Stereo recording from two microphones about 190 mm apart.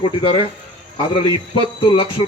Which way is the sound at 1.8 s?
25° left (ahead or behind).